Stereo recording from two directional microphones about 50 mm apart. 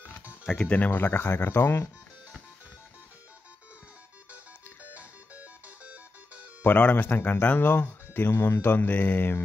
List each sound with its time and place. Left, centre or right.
0.6 s speech: left
0.8 s speech: left
4.9 s music: right
6.7 s speech: left
7.0 s speech: left